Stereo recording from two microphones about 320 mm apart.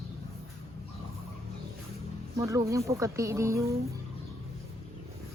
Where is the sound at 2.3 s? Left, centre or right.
Centre.